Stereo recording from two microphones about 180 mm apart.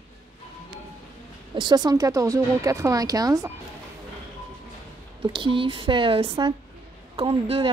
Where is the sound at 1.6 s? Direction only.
25° right (ahead or behind).